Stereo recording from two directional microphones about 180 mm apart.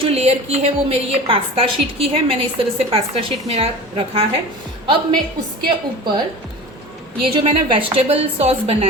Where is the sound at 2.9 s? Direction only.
30° right (ahead or behind).